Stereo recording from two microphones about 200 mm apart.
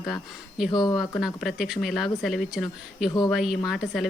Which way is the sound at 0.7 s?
20° left (ahead or behind).